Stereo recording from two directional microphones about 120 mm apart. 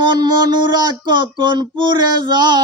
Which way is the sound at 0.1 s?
35° right (ahead or behind).